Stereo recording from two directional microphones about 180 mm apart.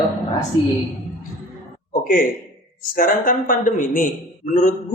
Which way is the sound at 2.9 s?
50° left (ahead or behind).